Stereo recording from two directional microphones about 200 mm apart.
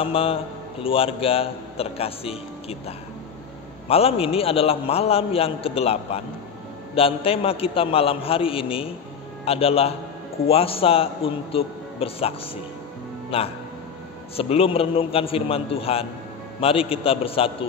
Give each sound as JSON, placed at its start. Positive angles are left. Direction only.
{"t": 0.0, "sound": "a man's voice", "side_deg": 30}
{"t": 3.9, "sound": "a man's voice", "side_deg": 30}